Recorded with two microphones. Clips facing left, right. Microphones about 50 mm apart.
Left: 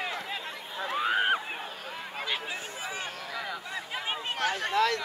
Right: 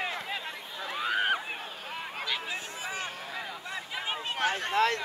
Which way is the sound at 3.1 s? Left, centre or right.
Right.